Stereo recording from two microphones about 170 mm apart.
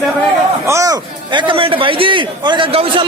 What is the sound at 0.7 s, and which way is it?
A man's voice, 20° right (ahead or behind).